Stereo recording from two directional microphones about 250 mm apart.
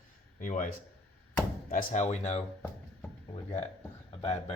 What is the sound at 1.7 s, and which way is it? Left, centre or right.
Speech, left.